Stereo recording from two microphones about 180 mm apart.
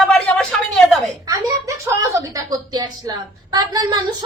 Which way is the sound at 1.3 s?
20° right (ahead or behind).